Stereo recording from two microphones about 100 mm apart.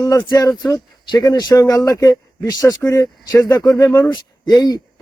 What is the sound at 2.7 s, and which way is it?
Speech, 30° left (ahead or behind).